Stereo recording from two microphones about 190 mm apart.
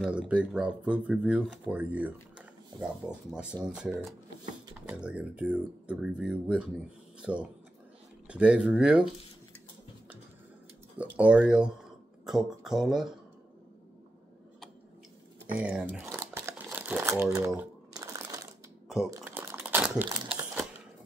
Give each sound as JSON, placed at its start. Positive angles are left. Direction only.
{"t": 0.0, "sound": "speech", "side_deg": -5}
{"t": 11.1, "sound": "speech", "side_deg": -5}
{"t": 15.6, "sound": "a sound", "side_deg": -5}
{"t": 16.7, "sound": "speech", "side_deg": -10}
{"t": 17.9, "sound": "crumpling", "side_deg": -20}